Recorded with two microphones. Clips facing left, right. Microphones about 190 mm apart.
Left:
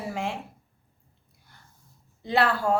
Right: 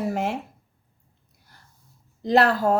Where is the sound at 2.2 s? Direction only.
40° right (ahead or behind).